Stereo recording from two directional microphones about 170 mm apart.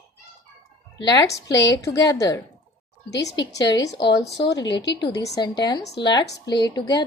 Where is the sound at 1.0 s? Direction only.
25° left (ahead or behind).